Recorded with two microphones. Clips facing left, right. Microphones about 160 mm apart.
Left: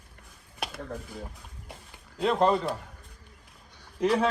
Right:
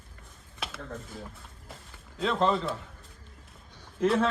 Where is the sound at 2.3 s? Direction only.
50° left (ahead or behind).